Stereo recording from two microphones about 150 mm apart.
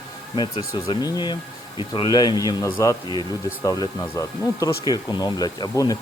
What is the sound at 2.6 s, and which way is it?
Speech, 15° left (ahead or behind).